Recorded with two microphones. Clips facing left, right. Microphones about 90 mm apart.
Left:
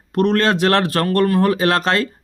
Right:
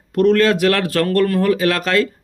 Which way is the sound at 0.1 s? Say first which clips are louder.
Right 3 dB; 25° left (ahead or behind).